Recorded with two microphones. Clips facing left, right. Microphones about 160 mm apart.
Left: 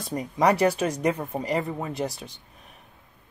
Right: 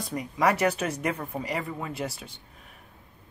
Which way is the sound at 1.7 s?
40° left (ahead or behind).